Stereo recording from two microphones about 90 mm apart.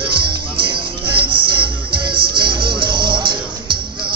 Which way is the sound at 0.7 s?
65° right (ahead or behind).